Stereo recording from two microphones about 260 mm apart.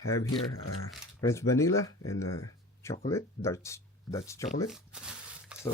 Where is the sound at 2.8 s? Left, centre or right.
Centre.